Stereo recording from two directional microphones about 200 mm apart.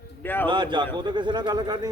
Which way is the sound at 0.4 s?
25° right (ahead or behind).